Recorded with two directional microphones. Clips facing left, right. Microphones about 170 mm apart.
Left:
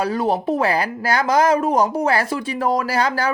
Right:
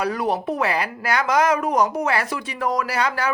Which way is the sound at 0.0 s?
30° left (ahead or behind).